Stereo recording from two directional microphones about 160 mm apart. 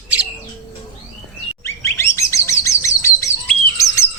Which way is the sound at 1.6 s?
15° left (ahead or behind).